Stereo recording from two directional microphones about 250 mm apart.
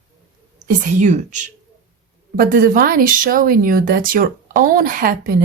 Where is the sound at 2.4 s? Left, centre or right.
Right.